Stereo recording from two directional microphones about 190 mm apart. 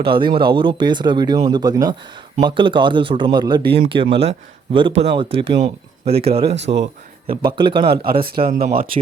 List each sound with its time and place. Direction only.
0.0 s speech: 25° right (ahead or behind)
6.6 s speech: 65° right (ahead or behind)
7.5 s speech: 25° right (ahead or behind)
7.9 s speech: 50° right (ahead or behind)
8.6 s speech: 30° right (ahead or behind)